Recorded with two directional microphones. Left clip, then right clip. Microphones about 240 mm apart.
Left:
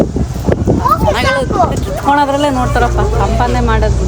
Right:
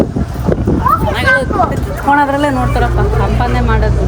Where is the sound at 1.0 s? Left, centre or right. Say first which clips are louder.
Even; left.